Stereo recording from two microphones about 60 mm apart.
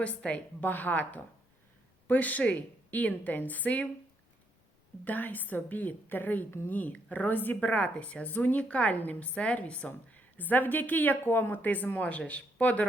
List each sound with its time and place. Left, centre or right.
0.0 s speech: left
5.0 s a woman's voice: left